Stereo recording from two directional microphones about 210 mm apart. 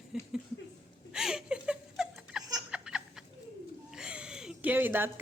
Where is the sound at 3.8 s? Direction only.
5° right (ahead or behind).